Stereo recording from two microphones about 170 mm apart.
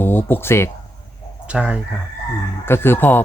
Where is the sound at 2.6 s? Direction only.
15° left (ahead or behind).